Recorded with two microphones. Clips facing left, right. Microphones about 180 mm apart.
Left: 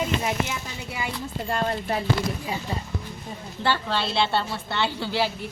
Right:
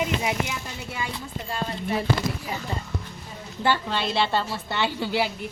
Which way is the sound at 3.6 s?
15° right (ahead or behind).